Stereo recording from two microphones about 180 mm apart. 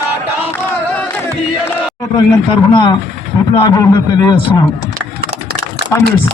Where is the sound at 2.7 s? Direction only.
25° left (ahead or behind).